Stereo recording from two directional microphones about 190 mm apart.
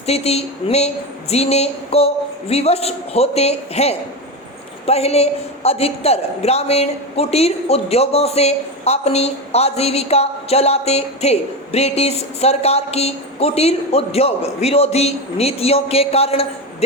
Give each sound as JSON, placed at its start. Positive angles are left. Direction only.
{"t": 0.0, "sound": "a woman's voice", "side_deg": 35}